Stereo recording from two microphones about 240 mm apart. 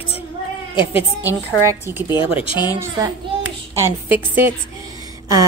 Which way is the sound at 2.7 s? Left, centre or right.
Centre.